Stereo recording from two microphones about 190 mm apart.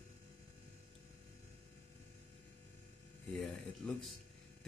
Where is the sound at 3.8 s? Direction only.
5° left (ahead or behind).